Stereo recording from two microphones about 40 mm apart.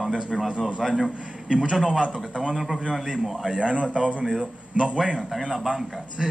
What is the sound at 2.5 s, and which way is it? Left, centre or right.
A man's voice, centre.